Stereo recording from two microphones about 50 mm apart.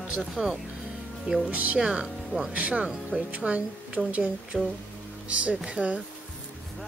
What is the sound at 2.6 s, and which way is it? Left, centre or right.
Speech, right.